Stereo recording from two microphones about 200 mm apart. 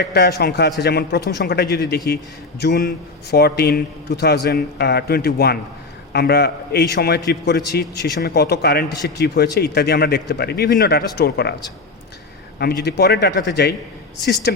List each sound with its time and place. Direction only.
0.0 s a man's voice: 55° left (ahead or behind)
12.5 s a man's voice: 55° left (ahead or behind)